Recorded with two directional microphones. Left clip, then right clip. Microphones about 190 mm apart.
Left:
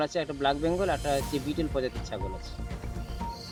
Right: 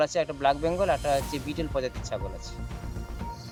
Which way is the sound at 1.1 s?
Centre (ahead or behind).